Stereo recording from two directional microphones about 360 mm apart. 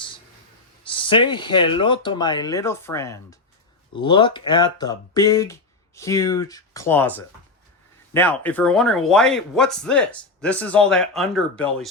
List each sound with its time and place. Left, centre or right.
0.9 s speech: centre
8.1 s a man's voice: centre